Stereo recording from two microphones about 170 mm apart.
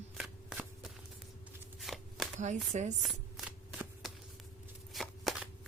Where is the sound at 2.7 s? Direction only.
45° right (ahead or behind).